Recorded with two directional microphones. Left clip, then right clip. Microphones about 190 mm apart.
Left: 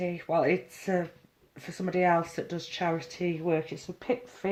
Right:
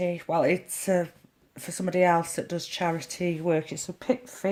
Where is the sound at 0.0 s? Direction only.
50° right (ahead or behind).